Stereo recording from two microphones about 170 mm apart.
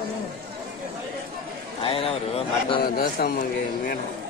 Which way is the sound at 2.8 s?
65° left (ahead or behind).